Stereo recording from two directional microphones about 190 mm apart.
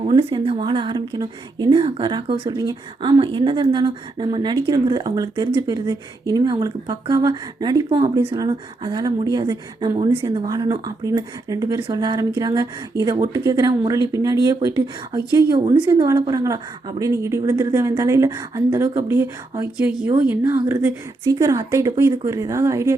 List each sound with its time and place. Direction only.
0.0 s speech: 30° right (ahead or behind)
15.9 s speech: 20° right (ahead or behind)